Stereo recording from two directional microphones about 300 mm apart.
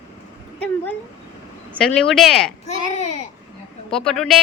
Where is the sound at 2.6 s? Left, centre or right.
Left.